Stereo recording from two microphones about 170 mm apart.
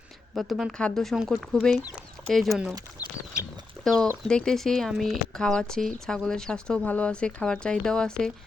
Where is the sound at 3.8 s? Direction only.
Centre (ahead or behind).